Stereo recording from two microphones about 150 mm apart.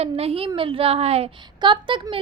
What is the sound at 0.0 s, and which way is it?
A woman's voice, 40° right (ahead or behind).